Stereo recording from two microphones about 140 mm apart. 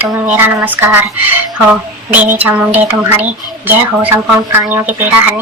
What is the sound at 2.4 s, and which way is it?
Speech, 10° right (ahead or behind).